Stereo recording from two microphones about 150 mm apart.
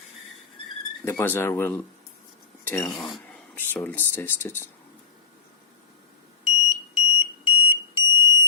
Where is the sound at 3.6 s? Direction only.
15° left (ahead or behind).